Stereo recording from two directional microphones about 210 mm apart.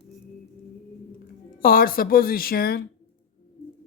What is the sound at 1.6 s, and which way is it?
A woman's voice, 45° left (ahead or behind).